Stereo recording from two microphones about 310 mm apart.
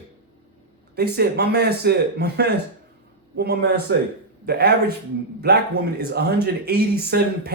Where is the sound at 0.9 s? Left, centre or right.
Right.